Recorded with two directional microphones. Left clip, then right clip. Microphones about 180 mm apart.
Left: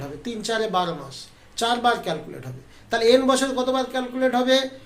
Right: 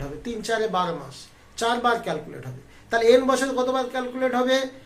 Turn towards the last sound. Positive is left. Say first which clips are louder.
# left 2 dB
turn(degrees=15)  # may be behind; listen again after turning